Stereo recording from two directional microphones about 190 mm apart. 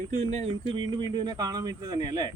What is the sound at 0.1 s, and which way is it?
Speech, 35° right (ahead or behind).